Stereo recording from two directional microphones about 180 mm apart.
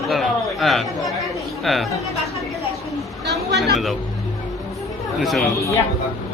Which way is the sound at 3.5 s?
65° right (ahead or behind).